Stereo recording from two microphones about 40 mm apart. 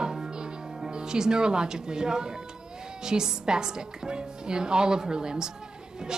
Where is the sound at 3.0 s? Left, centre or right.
Centre.